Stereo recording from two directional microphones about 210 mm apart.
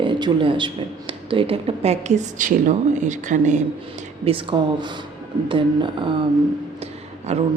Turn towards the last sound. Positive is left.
turn(degrees=-30)  # may be behind; listen again after turning